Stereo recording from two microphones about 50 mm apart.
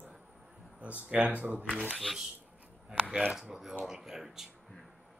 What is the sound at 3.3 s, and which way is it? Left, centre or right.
Speech, centre.